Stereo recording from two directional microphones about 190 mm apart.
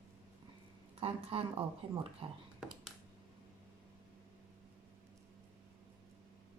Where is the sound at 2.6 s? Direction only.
5° right (ahead or behind).